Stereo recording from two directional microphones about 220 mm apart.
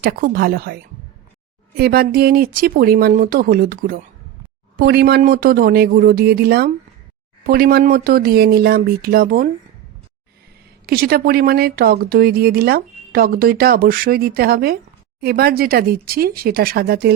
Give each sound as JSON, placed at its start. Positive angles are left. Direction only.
{"t": 0.0, "sound": "speech", "side_deg": -45}
{"t": 10.8, "sound": "speech", "side_deg": -45}